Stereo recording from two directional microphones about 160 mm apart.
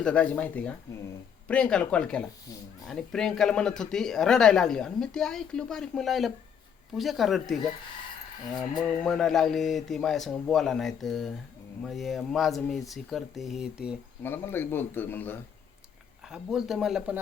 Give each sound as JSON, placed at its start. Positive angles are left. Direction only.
{"t": 0.0, "sound": "a man's voice", "side_deg": 10}
{"t": 9.0, "sound": "speech", "side_deg": 5}
{"t": 14.2, "sound": "a man's voice", "side_deg": 15}
{"t": 16.2, "sound": "speech", "side_deg": -5}